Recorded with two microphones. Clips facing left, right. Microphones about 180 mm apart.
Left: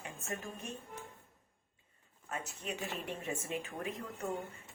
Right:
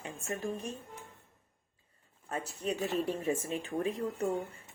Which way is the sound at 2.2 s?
35° right (ahead or behind).